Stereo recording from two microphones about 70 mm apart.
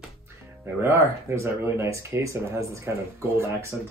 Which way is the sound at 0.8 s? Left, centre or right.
Right.